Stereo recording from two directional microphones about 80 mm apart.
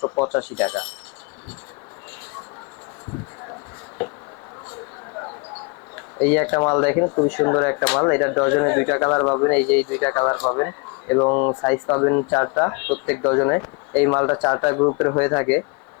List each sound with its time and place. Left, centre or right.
0.2 s speech: centre
6.1 s speech: centre
9.5 s speech: centre